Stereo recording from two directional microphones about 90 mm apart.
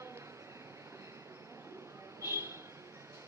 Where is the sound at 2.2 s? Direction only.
30° right (ahead or behind).